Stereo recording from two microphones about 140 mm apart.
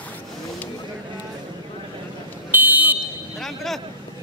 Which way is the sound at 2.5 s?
15° right (ahead or behind).